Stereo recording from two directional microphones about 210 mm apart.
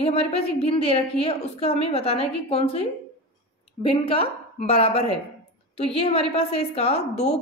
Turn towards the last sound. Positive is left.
turn(degrees=30)  # may be behind; listen again after turning